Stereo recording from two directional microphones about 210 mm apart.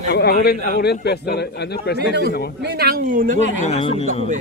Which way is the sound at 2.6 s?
50° right (ahead or behind).